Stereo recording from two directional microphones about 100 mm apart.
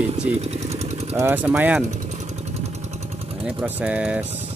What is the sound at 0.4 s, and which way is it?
Vehicle, 90° right.